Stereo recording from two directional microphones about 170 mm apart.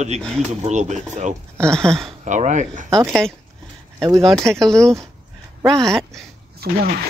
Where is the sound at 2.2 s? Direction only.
45° right (ahead or behind).